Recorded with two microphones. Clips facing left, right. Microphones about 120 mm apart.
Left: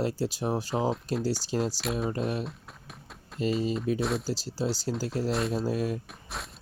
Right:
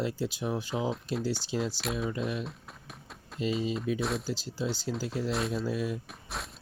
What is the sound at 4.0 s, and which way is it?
Speech, centre (ahead or behind).